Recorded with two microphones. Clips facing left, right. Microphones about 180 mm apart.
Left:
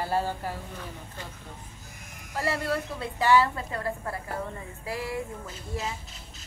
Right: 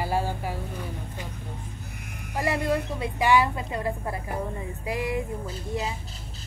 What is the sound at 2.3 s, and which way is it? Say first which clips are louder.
Speech: right 3 dB; 15° right (ahead or behind).